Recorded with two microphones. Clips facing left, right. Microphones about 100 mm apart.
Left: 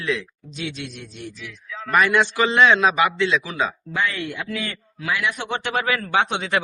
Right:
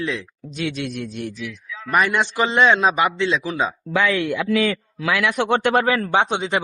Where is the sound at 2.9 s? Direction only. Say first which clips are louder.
Even; 40° right (ahead or behind).